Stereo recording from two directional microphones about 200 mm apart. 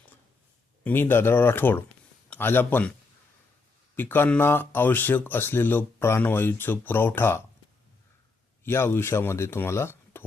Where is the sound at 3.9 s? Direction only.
10° left (ahead or behind).